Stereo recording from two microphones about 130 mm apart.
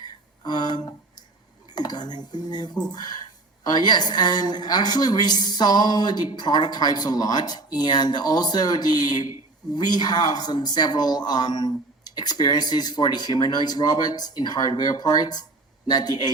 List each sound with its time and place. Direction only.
0.4 s a sound: 30° left (ahead or behind)
1.7 s cutlery: 30° left (ahead or behind)
2.8 s a woman's voice: 30° left (ahead or behind)